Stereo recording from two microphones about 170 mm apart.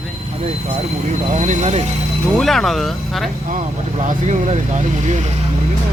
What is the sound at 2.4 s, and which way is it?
Speech, centre (ahead or behind).